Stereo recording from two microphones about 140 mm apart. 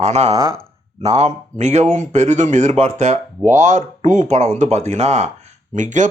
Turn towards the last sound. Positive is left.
turn(degrees=-65)  # may be behind; listen again after turning